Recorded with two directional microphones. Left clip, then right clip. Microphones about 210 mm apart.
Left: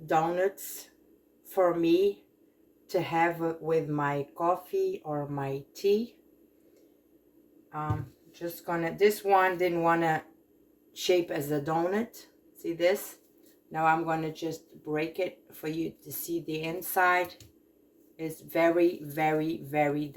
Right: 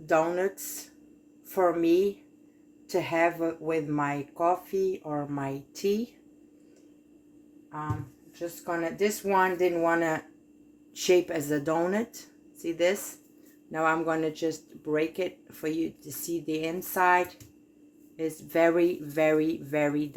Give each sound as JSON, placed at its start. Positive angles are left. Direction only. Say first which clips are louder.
{"t": 0.0, "sound": "speech", "louder": "right 1 dB", "side_deg": -35}
{"t": 8.8, "sound": "speech", "louder": "left 4 dB", "side_deg": -35}